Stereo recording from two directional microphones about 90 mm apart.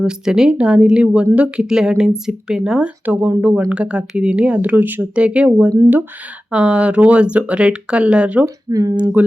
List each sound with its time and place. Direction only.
0.0 s speech: 10° right (ahead or behind)
8.7 s speech: 40° right (ahead or behind)
9.2 s speech: 20° right (ahead or behind)